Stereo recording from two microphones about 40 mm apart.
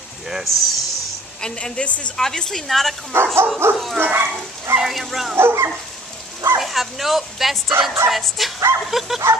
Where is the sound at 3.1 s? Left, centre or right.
Right.